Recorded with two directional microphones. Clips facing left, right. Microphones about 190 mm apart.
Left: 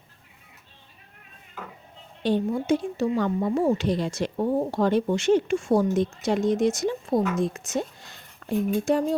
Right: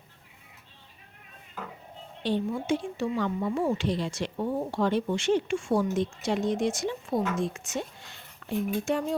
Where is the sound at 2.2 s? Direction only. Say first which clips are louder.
Left 4 dB; 45° left (ahead or behind).